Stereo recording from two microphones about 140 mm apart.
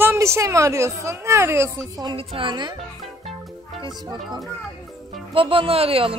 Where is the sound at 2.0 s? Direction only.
35° right (ahead or behind).